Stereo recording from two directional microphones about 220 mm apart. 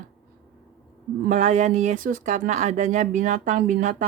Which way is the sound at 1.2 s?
35° right (ahead or behind).